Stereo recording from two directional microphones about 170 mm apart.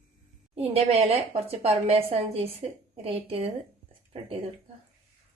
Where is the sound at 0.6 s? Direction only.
35° right (ahead or behind).